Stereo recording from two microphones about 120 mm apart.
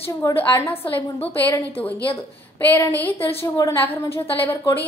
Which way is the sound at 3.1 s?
55° left (ahead or behind).